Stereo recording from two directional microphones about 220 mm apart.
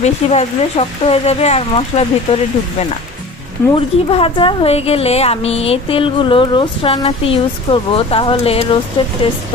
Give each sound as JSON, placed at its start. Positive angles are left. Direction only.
{"t": 0.0, "sound": "a woman's voice", "side_deg": 30}